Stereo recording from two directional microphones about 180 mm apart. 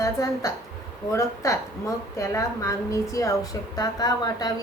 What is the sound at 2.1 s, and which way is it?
A woman's voice, 15° left (ahead or behind).